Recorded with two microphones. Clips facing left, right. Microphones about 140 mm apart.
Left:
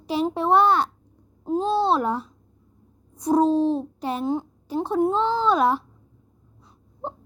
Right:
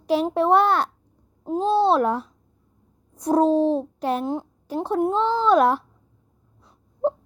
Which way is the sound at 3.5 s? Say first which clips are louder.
Right 2 dB; 40° right (ahead or behind).